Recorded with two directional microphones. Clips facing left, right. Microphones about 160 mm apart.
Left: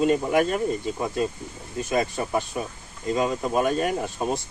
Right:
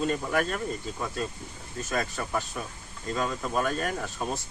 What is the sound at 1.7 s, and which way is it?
Speech, 15° left (ahead or behind).